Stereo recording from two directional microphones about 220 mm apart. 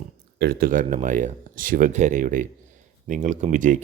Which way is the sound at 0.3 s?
45° right (ahead or behind).